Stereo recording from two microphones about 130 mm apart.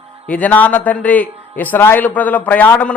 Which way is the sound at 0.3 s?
10° left (ahead or behind).